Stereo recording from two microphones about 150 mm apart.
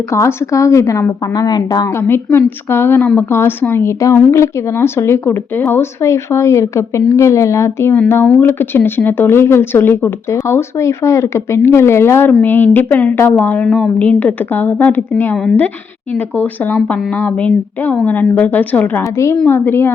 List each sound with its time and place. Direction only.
0.1 s speech: 20° left (ahead or behind)
2.0 s speech: 15° left (ahead or behind)